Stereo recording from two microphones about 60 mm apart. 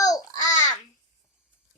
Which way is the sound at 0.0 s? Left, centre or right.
Left.